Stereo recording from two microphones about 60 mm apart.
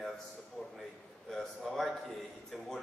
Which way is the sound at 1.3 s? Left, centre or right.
Centre.